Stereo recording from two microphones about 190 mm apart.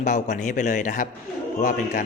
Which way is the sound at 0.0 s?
40° left (ahead or behind).